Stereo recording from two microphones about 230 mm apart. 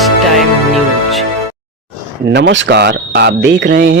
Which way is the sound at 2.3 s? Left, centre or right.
Right.